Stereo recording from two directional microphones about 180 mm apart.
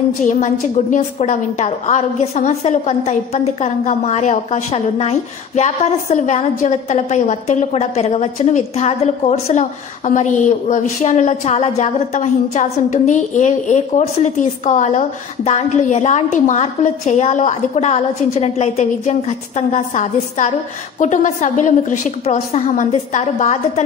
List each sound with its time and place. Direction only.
0.3 s a woman's voice: 45° left (ahead or behind)